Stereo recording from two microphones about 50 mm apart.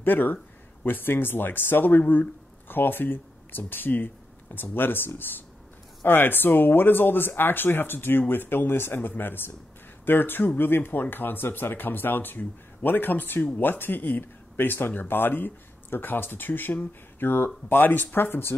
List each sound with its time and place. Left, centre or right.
0.0 s speech: left